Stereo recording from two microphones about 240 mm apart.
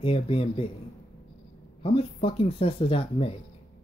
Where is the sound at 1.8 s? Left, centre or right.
Left.